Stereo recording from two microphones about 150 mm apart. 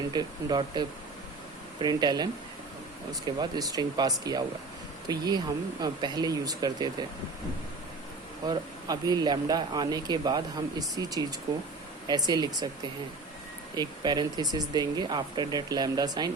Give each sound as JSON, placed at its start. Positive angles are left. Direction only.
{"t": 0.1, "sound": "speech", "side_deg": -30}
{"t": 8.4, "sound": "speech", "side_deg": -25}
{"t": 13.7, "sound": "speech", "side_deg": -25}